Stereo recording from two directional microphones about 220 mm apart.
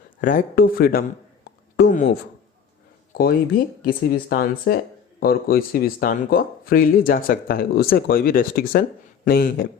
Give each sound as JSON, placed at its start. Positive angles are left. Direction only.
{"t": 0.2, "sound": "speech", "side_deg": 40}
{"t": 3.1, "sound": "speech", "side_deg": 40}